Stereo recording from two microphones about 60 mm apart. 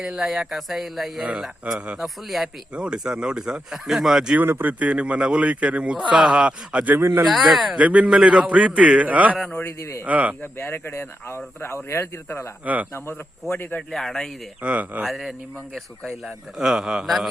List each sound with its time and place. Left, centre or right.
0.0 s speech: centre
4.4 s speech: right
4.8 s a man's voice: right
7.0 s speech: right
7.4 s speech: centre
7.8 s a man's voice: right
9.6 s speech: left
10.1 s a man's voice: right
10.4 s speech: left
12.6 s a man's voice: right
13.5 s speech: left
13.9 s speech: centre
14.6 s a man's voice: right
15.0 s a man's voice: centre